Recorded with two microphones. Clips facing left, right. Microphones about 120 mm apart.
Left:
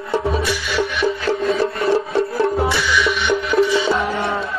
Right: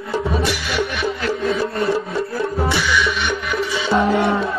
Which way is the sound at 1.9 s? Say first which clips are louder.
Left 3 dB; 25° left (ahead or behind).